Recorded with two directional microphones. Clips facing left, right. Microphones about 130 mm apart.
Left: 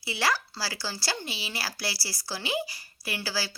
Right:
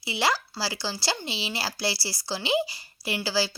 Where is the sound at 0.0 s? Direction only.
20° right (ahead or behind).